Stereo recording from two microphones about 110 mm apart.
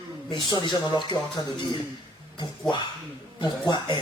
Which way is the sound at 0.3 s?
45° left (ahead or behind).